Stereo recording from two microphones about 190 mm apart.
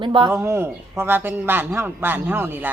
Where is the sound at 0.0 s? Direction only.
25° right (ahead or behind).